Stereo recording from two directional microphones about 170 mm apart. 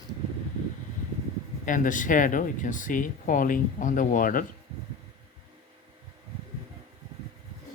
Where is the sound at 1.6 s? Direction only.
50° left (ahead or behind).